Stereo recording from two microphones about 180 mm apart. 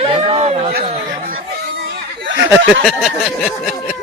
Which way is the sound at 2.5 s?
Centre (ahead or behind).